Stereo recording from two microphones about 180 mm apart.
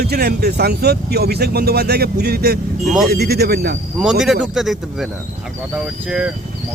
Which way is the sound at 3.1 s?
60° right (ahead or behind).